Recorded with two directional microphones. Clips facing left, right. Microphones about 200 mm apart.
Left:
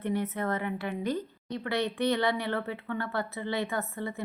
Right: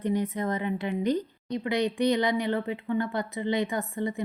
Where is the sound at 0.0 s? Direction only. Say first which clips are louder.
Right 3 dB; 15° right (ahead or behind).